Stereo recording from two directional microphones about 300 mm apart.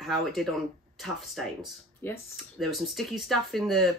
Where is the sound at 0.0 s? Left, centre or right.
Centre.